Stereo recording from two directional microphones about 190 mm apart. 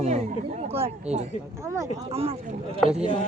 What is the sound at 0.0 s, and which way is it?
Speech, 40° right (ahead or behind).